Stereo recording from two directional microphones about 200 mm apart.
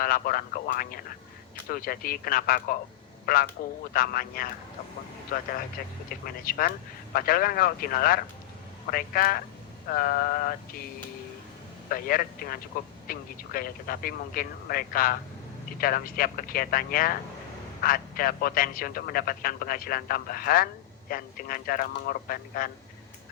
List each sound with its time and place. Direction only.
0.0 s speech: 45° left (ahead or behind)
11.9 s speech: 45° left (ahead or behind)